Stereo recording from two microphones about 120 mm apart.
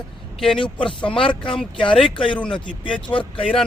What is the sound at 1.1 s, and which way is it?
Speech, 45° left (ahead or behind).